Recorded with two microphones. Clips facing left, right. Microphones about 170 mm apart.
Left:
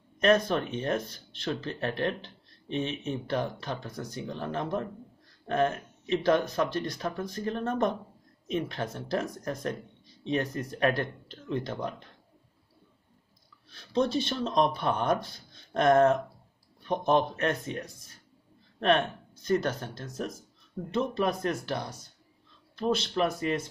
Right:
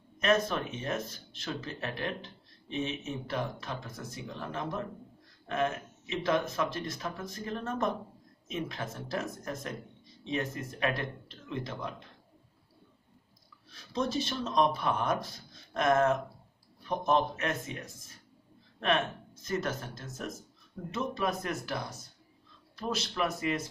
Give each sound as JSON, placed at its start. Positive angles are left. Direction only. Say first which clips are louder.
{"t": 0.2, "sound": "speech", "louder": "left 4 dB", "side_deg": 30}
{"t": 13.7, "sound": "speech", "louder": "left 5 dB", "side_deg": 35}